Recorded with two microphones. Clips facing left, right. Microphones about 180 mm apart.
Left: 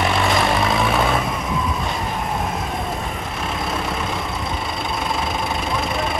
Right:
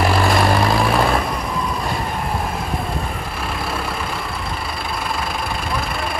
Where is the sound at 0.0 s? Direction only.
Centre (ahead or behind).